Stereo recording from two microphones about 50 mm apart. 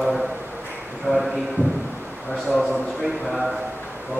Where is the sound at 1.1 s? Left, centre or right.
Right.